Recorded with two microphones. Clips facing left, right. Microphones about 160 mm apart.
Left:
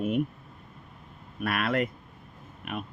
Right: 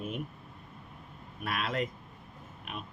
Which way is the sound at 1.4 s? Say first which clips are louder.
Left 6 dB; 60° left (ahead or behind).